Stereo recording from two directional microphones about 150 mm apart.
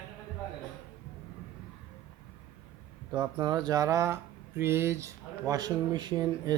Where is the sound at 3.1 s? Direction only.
25° right (ahead or behind).